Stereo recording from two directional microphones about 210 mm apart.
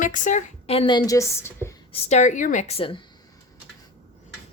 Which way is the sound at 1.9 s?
35° left (ahead or behind).